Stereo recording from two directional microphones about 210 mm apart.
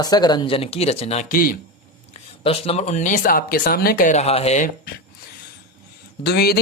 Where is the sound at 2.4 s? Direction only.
30° left (ahead or behind).